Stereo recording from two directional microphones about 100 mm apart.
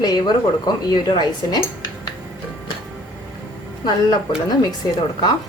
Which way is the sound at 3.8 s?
45° left (ahead or behind).